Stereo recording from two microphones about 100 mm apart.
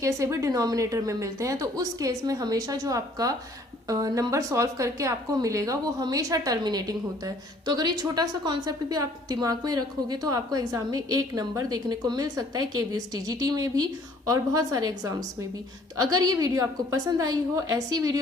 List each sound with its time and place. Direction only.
0.0 s a woman's voice: 30° right (ahead or behind)
16.0 s a woman's voice: 40° right (ahead or behind)